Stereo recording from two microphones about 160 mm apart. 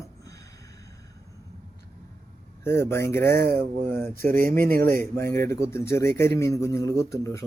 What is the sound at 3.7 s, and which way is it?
Speech, 65° right (ahead or behind).